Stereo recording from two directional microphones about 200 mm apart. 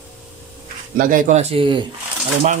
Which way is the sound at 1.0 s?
40° right (ahead or behind).